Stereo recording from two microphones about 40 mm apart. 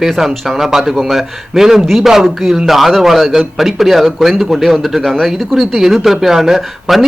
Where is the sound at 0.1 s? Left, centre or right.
Centre.